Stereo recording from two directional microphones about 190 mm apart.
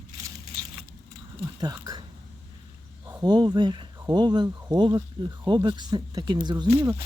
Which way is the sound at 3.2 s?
20° right (ahead or behind).